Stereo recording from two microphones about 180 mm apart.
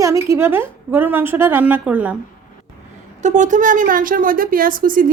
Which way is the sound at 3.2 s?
45° right (ahead or behind).